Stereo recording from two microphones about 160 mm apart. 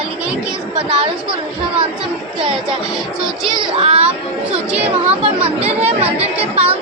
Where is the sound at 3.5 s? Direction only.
35° right (ahead or behind).